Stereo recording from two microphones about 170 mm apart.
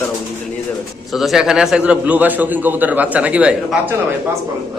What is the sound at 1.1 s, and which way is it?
A man's voice, centre (ahead or behind).